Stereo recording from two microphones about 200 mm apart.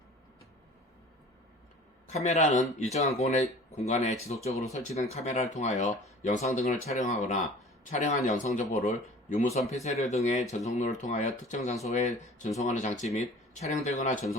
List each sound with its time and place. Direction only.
2.2 s speech: 35° left (ahead or behind)